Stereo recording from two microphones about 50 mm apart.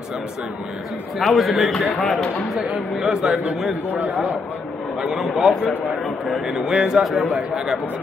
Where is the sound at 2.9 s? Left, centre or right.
Centre.